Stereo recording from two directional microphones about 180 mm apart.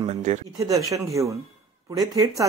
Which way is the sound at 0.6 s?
20° right (ahead or behind).